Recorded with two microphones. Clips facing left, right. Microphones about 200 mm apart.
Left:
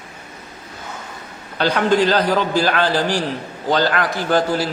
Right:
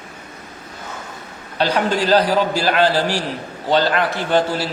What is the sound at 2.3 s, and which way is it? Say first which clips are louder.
Speech: even; 35° right (ahead or behind).